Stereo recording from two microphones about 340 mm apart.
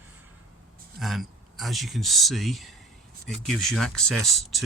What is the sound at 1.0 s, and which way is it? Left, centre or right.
Speech, centre.